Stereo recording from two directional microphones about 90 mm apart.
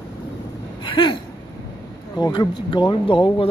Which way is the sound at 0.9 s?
65° left (ahead or behind).